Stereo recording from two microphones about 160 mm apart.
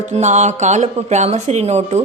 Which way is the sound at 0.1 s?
45° right (ahead or behind).